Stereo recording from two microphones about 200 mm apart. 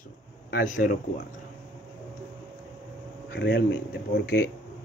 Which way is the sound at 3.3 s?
60° left (ahead or behind).